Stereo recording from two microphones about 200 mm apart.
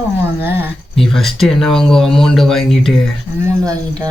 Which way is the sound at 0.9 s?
Centre (ahead or behind).